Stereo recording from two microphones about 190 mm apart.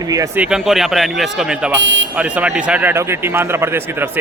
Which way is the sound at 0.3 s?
5° right (ahead or behind).